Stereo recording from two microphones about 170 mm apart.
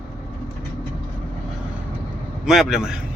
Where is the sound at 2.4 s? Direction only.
5° right (ahead or behind).